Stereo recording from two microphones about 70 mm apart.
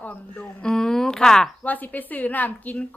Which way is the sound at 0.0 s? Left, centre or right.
Centre.